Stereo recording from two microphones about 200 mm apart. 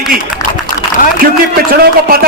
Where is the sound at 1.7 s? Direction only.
50° right (ahead or behind).